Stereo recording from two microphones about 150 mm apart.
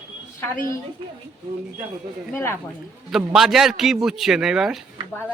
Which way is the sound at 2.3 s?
15° left (ahead or behind).